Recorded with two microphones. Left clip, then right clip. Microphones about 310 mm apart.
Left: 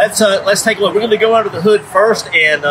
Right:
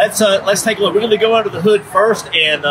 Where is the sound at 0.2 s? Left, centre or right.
Centre.